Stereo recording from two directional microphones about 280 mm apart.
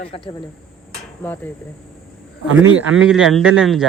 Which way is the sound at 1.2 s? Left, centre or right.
Centre.